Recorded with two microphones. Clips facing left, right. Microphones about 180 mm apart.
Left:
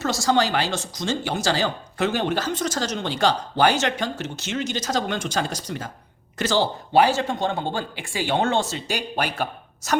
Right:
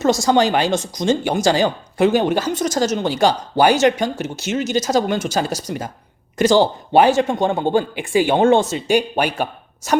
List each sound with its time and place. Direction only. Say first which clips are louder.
0.0 s speech: right 6 dB; 20° right (ahead or behind)
6.9 s speech: right 5 dB; 20° right (ahead or behind)